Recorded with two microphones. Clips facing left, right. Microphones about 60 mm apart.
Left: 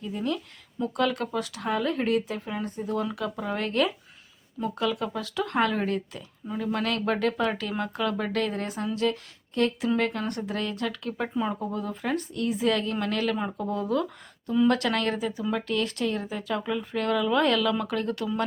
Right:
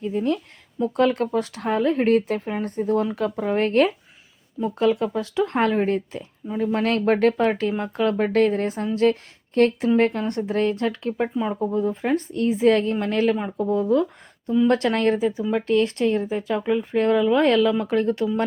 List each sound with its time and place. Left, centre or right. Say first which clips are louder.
0.0 s speech: right 6 dB; right
7.7 s speech: right 5 dB; right
8.0 s speech: right 10 dB; right
9.9 s speech: right 7 dB; right
13.3 s speech: right 6 dB; centre